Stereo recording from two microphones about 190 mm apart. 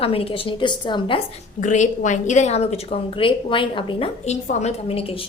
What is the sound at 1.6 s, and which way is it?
Speech, 40° left (ahead or behind).